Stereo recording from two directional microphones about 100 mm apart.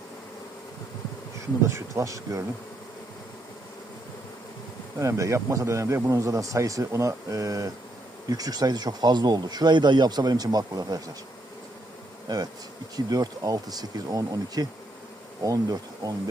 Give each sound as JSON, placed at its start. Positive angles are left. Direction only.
{"t": 1.6, "sound": "speech", "side_deg": -30}
{"t": 4.9, "sound": "speech", "side_deg": -30}
{"t": 13.1, "sound": "speech", "side_deg": -40}